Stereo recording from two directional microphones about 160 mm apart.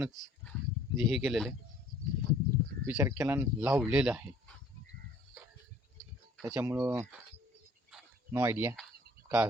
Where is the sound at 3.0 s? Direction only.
15° right (ahead or behind).